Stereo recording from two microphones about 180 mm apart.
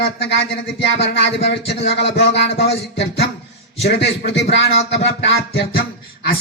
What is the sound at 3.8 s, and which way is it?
Speech, 75° left (ahead or behind).